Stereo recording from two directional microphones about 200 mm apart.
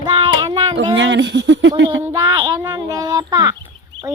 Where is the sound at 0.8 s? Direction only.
70° right (ahead or behind).